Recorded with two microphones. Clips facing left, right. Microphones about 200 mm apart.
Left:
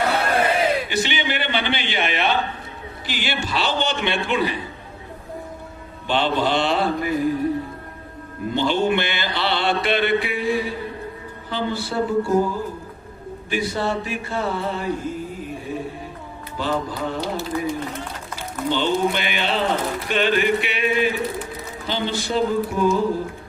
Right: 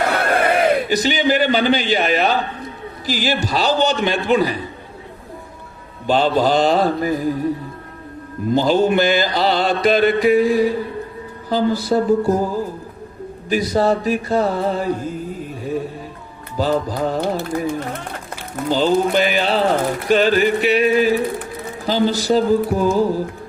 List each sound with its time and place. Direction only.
0.4 s a sound: 55° right (ahead or behind)
0.9 s speech: 40° right (ahead or behind)
6.1 s speech: 40° right (ahead or behind)
8.5 s speech: 40° right (ahead or behind)
16.6 s speech: 40° right (ahead or behind)
17.2 s speech: 55° right (ahead or behind)
18.3 s speech: 40° right (ahead or behind)